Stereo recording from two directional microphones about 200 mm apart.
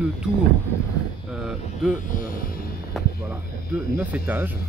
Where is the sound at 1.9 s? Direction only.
45° left (ahead or behind).